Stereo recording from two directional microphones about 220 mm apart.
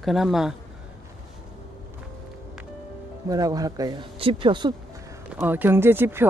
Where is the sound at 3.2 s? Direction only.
15° right (ahead or behind).